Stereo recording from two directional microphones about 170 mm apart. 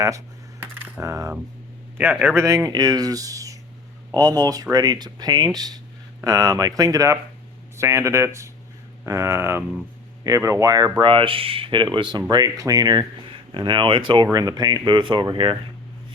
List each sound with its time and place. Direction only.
0.6 s coin: 10° right (ahead or behind)
2.0 s speech: 10° right (ahead or behind); by 15.5 s 30° right (ahead or behind)